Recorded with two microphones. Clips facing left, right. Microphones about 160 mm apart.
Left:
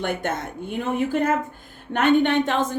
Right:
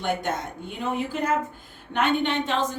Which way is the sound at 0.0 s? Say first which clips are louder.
Left 1 dB; 55° left (ahead or behind).